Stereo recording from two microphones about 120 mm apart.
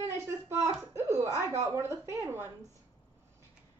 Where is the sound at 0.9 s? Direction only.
20° right (ahead or behind).